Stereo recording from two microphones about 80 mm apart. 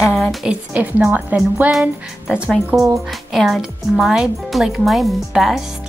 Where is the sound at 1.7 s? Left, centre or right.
Centre.